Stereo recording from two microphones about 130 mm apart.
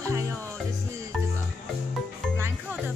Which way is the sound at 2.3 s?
20° right (ahead or behind).